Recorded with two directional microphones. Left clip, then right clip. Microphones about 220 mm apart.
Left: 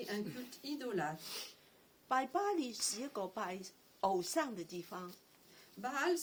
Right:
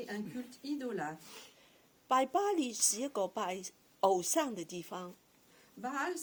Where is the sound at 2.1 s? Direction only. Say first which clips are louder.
Right 5 dB; 50° right (ahead or behind).